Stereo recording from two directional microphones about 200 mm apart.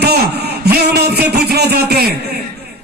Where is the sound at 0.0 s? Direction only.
55° right (ahead or behind).